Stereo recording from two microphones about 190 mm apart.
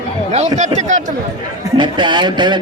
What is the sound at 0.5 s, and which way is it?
Speech, 40° right (ahead or behind).